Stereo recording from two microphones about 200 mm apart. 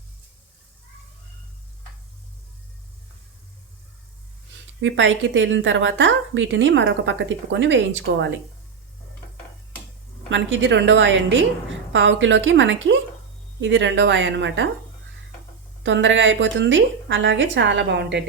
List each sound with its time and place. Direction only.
4.8 s a woman's voice: 70° right (ahead or behind)
10.2 s a woman's voice: 70° right (ahead or behind)
15.8 s a woman's voice: 65° right (ahead or behind)